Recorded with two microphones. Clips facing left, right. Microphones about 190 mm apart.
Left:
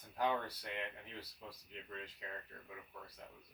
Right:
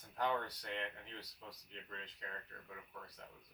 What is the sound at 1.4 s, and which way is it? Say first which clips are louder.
Speech: left 2 dB; 10° left (ahead or behind).